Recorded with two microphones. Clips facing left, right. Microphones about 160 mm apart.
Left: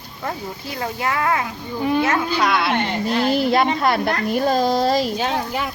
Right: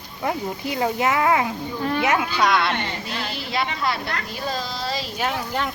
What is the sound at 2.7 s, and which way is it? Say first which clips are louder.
A woman's voice: left 8 dB; 45° left (ahead or behind).